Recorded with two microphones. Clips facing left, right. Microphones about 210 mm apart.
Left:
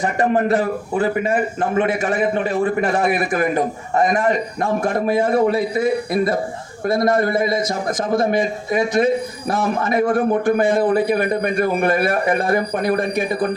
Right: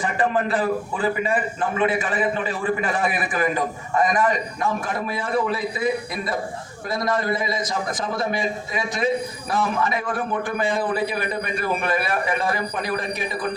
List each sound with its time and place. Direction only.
0.0 s a man's voice: 45° left (ahead or behind)
0.6 s a man's voice: 55° left (ahead or behind)
2.8 s a man's voice: 45° left (ahead or behind)